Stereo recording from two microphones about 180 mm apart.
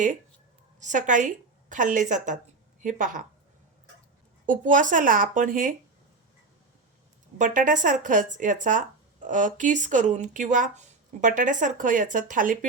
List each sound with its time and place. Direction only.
0.8 s speech: 45° right (ahead or behind)
4.4 s speech: 45° right (ahead or behind)
7.3 s speech: 45° right (ahead or behind)